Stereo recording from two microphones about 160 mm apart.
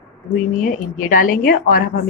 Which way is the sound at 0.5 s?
60° left (ahead or behind).